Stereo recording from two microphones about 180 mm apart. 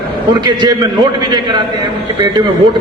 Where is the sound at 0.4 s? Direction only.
25° right (ahead or behind).